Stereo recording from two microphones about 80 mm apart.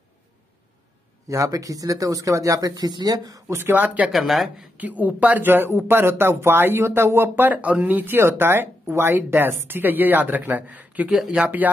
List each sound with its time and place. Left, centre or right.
1.3 s speech: right
3.4 s speech: right
4.1 s speech: centre
4.7 s speech: centre
11.1 s speech: centre